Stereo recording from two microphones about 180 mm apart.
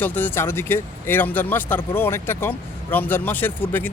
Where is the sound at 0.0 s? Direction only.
10° left (ahead or behind).